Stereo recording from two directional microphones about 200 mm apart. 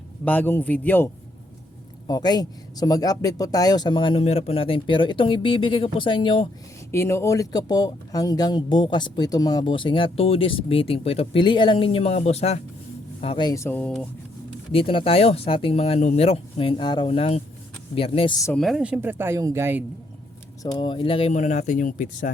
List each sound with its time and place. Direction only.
0.3 s speech: 10° left (ahead or behind)
2.0 s speech: 20° left (ahead or behind)
6.9 s speech: 15° left (ahead or behind)
14.7 s speech: 25° left (ahead or behind)
18.4 s speech: centre (ahead or behind)
20.6 s speech: 20° left (ahead or behind); by 22.1 s 40° left (ahead or behind)